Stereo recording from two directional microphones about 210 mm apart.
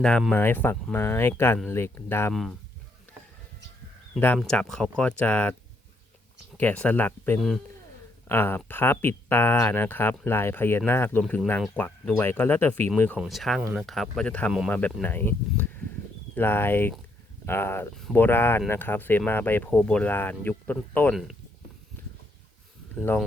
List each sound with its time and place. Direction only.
0.0 s speech: 5° left (ahead or behind)
4.4 s speech: centre (ahead or behind)
6.6 s speech: 5° left (ahead or behind)
23.0 s speech: 10° left (ahead or behind)